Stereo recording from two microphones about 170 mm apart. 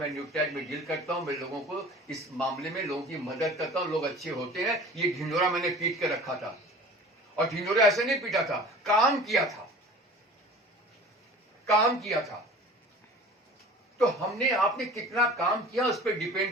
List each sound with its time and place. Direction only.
0.1 s speech: centre (ahead or behind)
2.4 s speech: centre (ahead or behind)
11.6 s speech: centre (ahead or behind)
14.3 s speech: centre (ahead or behind)